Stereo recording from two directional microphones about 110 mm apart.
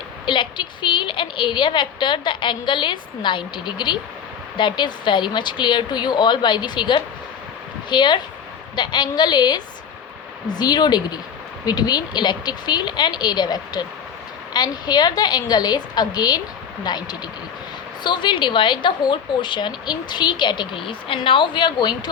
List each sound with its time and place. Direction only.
0.3 s a woman's voice: 45° left (ahead or behind)